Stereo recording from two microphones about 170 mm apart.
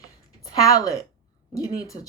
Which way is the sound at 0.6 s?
20° left (ahead or behind).